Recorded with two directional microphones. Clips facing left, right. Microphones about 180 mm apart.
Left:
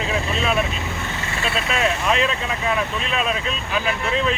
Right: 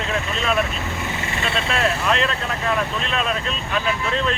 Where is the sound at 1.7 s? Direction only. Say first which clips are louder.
Even; 5° left (ahead or behind).